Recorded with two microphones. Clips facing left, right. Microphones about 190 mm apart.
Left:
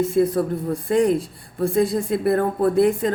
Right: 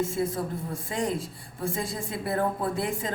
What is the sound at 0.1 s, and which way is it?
A woman's voice, 65° left (ahead or behind).